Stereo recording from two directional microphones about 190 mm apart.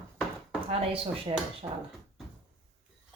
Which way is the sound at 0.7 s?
30° right (ahead or behind).